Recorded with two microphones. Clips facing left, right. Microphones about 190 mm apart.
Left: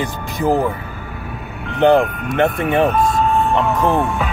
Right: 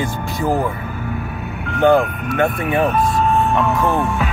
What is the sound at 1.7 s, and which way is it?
Speech, 20° left (ahead or behind).